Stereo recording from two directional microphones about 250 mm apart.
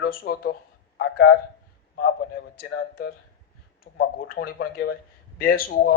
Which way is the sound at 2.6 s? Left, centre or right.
Left.